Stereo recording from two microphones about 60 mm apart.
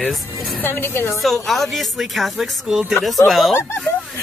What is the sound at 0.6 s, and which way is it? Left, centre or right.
Speech, left.